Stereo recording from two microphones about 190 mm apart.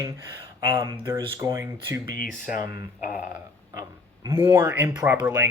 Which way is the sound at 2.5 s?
50° left (ahead or behind).